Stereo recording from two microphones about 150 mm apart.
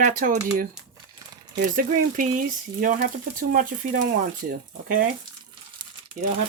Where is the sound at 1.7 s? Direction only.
65° right (ahead or behind).